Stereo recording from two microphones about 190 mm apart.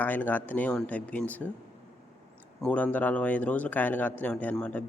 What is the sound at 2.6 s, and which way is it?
Speech, 5° left (ahead or behind).